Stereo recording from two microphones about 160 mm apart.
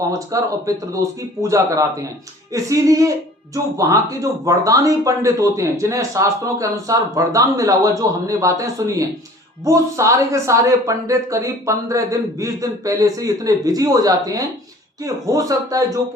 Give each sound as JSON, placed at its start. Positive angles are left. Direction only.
{"t": 0.0, "sound": "speech", "side_deg": -20}